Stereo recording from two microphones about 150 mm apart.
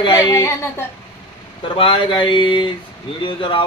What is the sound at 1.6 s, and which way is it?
Speech, 35° left (ahead or behind).